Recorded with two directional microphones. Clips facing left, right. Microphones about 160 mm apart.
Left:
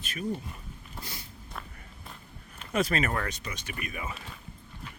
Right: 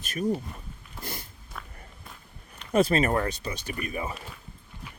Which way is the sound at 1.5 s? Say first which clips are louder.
Even; centre (ahead or behind).